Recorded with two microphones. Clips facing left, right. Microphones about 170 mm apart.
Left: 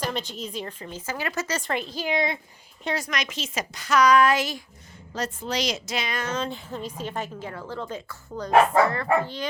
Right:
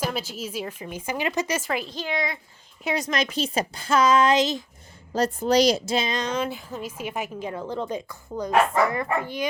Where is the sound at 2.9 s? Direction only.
25° right (ahead or behind).